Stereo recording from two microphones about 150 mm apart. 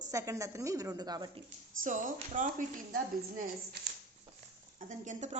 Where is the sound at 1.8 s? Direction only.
55° right (ahead or behind).